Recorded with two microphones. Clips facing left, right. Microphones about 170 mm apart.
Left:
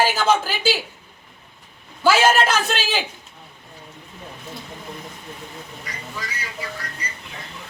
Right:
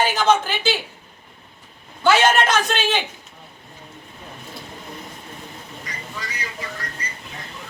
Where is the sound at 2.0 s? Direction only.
5° left (ahead or behind).